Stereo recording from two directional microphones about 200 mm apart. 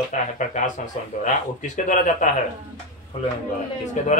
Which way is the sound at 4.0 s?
40° left (ahead or behind).